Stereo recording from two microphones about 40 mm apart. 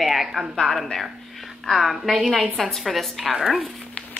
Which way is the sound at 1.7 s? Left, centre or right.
Centre.